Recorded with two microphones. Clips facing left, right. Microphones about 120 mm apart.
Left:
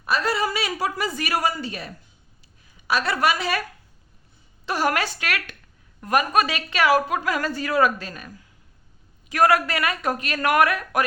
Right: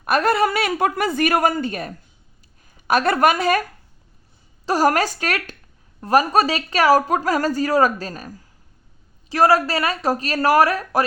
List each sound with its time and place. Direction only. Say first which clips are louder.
0.0 s a woman's voice: right 6 dB; 55° right (ahead or behind)
4.6 s a woman's voice: right 6 dB; 40° right (ahead or behind)